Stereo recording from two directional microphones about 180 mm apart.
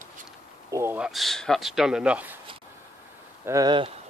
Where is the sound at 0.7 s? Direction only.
10° right (ahead or behind).